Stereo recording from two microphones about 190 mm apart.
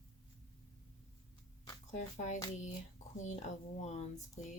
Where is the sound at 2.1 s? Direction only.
40° left (ahead or behind).